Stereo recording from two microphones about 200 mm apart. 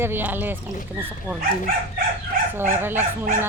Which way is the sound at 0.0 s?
10° right (ahead or behind).